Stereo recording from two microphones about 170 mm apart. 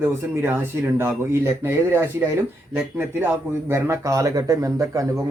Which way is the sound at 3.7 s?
15° right (ahead or behind).